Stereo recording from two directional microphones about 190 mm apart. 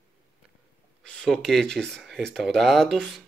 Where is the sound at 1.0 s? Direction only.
5° left (ahead or behind).